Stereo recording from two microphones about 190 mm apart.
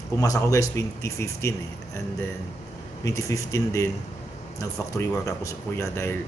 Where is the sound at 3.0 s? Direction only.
15° left (ahead or behind).